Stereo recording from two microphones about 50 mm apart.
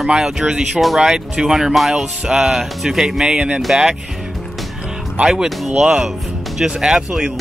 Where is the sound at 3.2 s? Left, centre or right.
Right.